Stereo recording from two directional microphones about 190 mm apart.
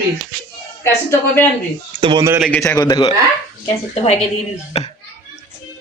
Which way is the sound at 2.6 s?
15° left (ahead or behind).